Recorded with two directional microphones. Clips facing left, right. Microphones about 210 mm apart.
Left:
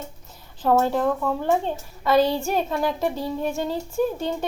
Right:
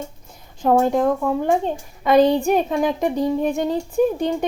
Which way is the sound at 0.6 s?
15° right (ahead or behind).